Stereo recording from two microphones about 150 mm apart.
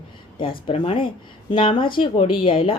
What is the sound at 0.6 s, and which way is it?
A woman's voice, 40° left (ahead or behind).